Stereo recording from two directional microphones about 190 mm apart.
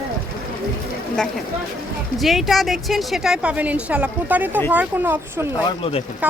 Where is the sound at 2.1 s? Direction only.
Centre (ahead or behind).